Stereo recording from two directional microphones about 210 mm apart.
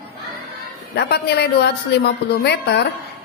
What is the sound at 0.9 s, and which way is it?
A woman's voice, 50° left (ahead or behind).